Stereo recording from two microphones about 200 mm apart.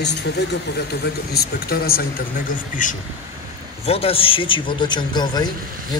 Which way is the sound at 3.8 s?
30° left (ahead or behind).